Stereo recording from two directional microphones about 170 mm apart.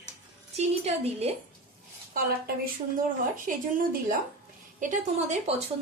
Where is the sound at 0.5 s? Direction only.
35° right (ahead or behind).